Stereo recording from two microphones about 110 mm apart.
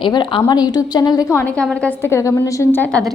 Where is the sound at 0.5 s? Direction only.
35° left (ahead or behind).